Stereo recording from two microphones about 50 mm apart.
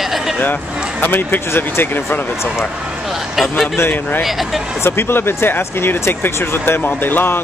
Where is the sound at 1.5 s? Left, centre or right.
Left.